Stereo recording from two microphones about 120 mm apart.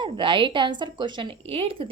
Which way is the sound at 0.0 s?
40° right (ahead or behind).